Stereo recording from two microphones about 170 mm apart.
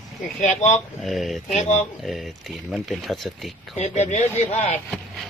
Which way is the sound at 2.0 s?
Centre (ahead or behind).